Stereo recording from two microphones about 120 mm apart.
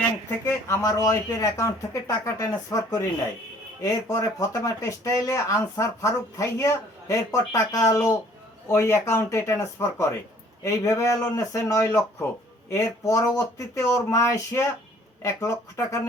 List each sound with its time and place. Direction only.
0.3 s speech: 25° left (ahead or behind)